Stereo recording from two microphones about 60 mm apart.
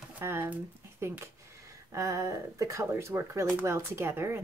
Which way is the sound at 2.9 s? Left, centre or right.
Right.